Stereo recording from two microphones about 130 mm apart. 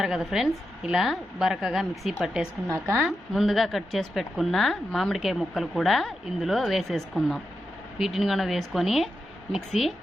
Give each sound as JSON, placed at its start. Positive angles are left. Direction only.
{"t": 0.0, "sound": "a woman's voice", "side_deg": -5}
{"t": 2.6, "sound": "a woman's voice", "side_deg": -20}
{"t": 3.0, "sound": "a woman's voice", "side_deg": 0}